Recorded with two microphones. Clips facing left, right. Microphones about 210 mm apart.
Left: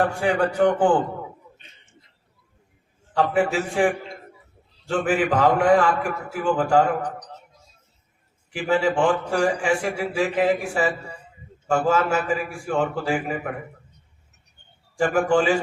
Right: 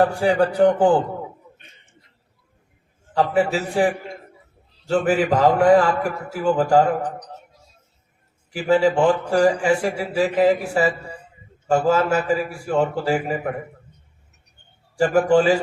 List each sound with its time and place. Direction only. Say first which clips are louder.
0.0 s a man's voice: right 4 dB; 35° right (ahead or behind)
3.2 s a man's voice: right 1 dB; 35° right (ahead or behind)
8.5 s a man's voice: right 4 dB; 35° right (ahead or behind)
14.9 s a man's voice: right 3 dB; 35° right (ahead or behind)